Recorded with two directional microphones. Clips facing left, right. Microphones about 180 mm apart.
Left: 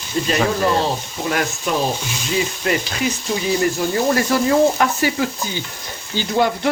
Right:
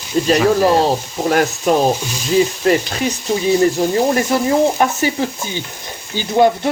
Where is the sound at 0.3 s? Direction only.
35° right (ahead or behind).